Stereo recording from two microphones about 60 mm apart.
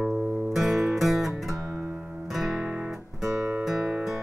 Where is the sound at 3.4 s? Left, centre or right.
Right.